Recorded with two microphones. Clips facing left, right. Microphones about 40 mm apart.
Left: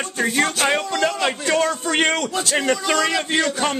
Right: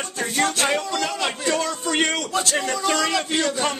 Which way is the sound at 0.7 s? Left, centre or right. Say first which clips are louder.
Left 3 dB; left.